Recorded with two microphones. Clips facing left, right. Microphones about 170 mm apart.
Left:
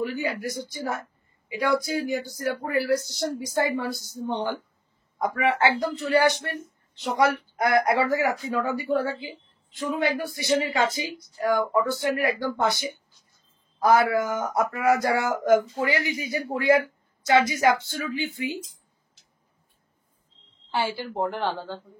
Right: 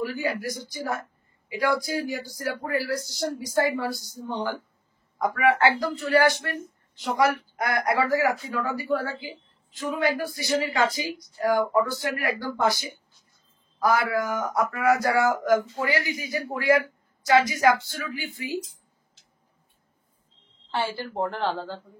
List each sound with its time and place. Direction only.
0.0 s speech: 20° left (ahead or behind)
20.9 s speech: 10° left (ahead or behind)